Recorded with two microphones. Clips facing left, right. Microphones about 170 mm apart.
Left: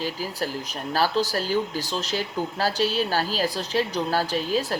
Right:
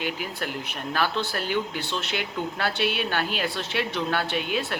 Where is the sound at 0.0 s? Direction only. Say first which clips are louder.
Left 2 dB; 35° left (ahead or behind).